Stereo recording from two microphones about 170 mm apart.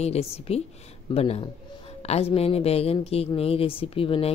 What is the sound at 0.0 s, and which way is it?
Speech, 35° left (ahead or behind).